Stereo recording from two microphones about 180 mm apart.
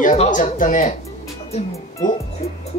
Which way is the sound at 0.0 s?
45° left (ahead or behind).